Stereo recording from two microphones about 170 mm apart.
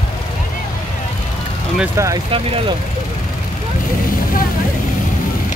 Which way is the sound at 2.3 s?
30° right (ahead or behind).